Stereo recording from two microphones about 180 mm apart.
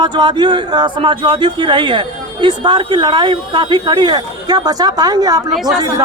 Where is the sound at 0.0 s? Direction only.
25° right (ahead or behind).